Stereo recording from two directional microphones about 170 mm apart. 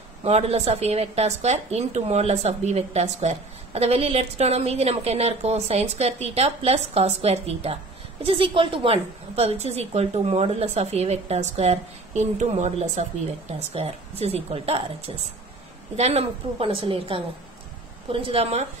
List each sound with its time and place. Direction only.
0.2 s a woman's voice: 40° right (ahead or behind)